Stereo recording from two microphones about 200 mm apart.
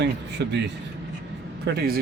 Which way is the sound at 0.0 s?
60° right (ahead or behind).